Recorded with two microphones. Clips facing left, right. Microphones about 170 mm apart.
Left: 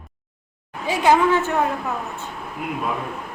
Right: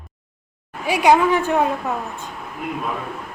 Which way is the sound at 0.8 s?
15° right (ahead or behind).